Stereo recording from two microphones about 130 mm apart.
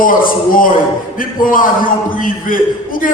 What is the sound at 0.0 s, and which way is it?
A man's voice, 90° left.